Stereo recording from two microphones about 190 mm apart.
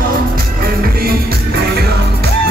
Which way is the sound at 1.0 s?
55° right (ahead or behind).